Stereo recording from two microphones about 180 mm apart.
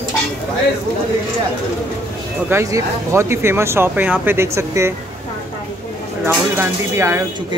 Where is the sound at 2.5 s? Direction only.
15° right (ahead or behind).